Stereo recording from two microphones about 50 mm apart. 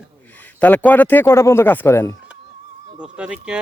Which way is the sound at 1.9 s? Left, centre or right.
Left.